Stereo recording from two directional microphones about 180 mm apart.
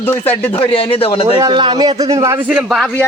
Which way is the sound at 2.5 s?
5° right (ahead or behind).